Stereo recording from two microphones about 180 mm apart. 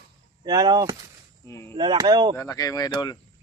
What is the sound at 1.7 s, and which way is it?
Speech, 25° right (ahead or behind).